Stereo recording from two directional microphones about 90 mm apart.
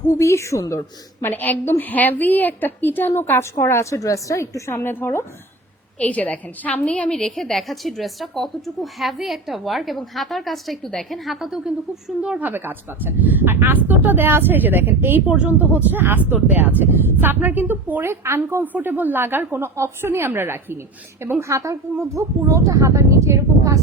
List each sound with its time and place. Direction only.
0.2 s a woman's voice: 35° left (ahead or behind)
1.2 s a woman's voice: 20° left (ahead or behind); by 23.8 s 35° right (ahead or behind)